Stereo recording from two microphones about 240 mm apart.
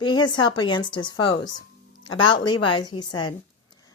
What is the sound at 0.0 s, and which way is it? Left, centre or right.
A woman's voice, centre.